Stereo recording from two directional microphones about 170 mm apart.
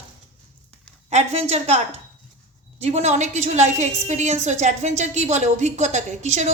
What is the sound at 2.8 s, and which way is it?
A woman's voice, 40° right (ahead or behind).